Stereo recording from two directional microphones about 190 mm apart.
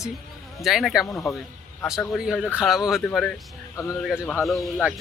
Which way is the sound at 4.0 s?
Centre (ahead or behind).